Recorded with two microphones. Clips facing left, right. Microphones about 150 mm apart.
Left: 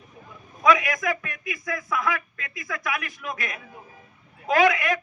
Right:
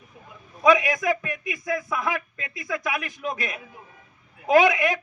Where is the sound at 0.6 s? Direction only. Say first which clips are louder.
Right 2 dB; 25° right (ahead or behind).